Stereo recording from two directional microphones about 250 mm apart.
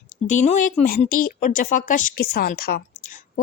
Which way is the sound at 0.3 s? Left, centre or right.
Left.